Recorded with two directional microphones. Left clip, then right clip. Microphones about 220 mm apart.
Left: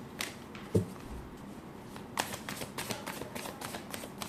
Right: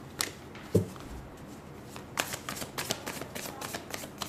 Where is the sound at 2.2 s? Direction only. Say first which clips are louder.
Right 2 dB; 25° right (ahead or behind).